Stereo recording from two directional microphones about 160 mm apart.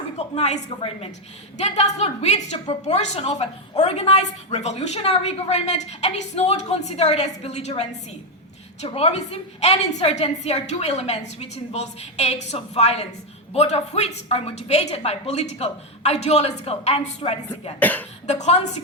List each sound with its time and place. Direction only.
0.2 s a woman's voice: 40° left (ahead or behind)
8.9 s a woman's voice: 40° left (ahead or behind)
17.7 s speech: 10° left (ahead or behind)
18.3 s a woman's voice: 45° left (ahead or behind)